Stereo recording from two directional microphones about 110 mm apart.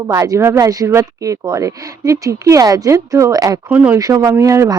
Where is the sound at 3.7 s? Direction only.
15° right (ahead or behind).